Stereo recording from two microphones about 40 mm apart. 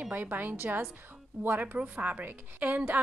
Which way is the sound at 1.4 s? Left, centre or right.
Right.